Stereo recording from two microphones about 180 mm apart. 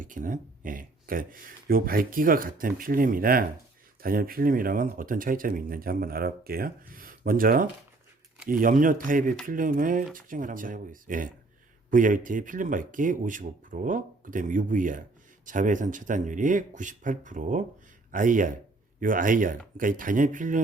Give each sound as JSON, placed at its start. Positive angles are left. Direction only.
{"t": 0.0, "sound": "speech", "side_deg": -45}